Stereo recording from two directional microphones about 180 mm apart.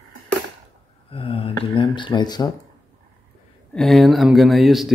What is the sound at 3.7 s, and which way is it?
Speech, centre (ahead or behind).